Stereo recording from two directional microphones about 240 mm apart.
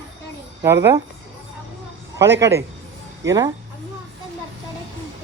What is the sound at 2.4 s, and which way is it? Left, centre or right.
Speech, centre.